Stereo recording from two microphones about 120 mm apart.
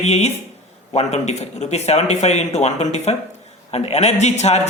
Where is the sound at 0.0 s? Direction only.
65° left (ahead or behind).